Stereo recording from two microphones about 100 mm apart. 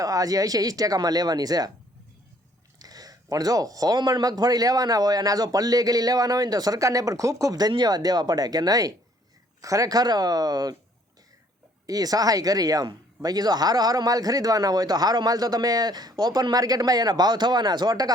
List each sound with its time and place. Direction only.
0.0 s speech: 35° right (ahead or behind)
2.7 s speech: 40° right (ahead or behind)
11.9 s speech: 40° right (ahead or behind)